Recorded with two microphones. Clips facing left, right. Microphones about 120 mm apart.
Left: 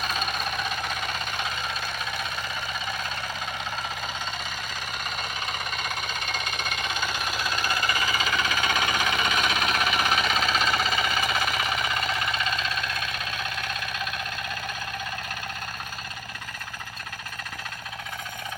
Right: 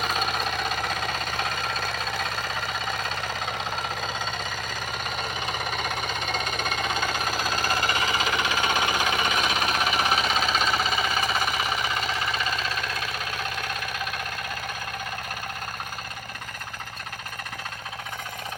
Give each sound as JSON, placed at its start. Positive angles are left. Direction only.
{"t": 7.3, "sound": "jackhammer", "side_deg": -40}
{"t": 10.4, "sound": "engine", "side_deg": -5}
{"t": 11.0, "sound": "jackhammer", "side_deg": -25}
{"t": 11.6, "sound": "engine", "side_deg": 0}